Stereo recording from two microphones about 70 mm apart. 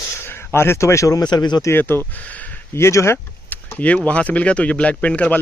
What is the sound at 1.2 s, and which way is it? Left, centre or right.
Speech, left.